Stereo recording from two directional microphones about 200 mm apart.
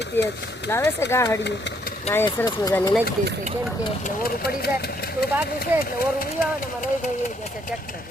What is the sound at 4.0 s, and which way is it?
Speech, 50° left (ahead or behind).